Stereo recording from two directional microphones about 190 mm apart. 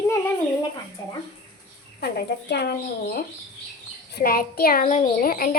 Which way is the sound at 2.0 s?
55° left (ahead or behind).